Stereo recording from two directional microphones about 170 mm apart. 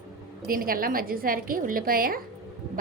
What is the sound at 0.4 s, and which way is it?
A woman's voice, 60° right (ahead or behind).